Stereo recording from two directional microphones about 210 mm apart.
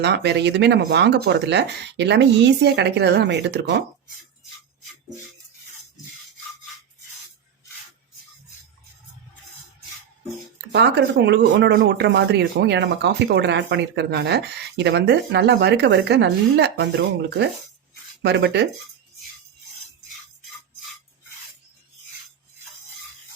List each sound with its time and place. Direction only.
0.0 s speech: 55° right (ahead or behind)
10.7 s speech: 55° right (ahead or behind)